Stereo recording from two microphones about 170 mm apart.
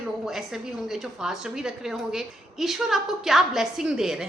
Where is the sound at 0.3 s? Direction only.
Centre (ahead or behind).